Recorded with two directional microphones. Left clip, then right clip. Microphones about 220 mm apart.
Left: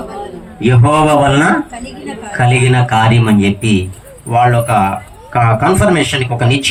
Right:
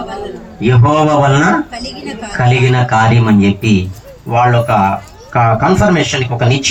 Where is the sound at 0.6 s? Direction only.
50° left (ahead or behind).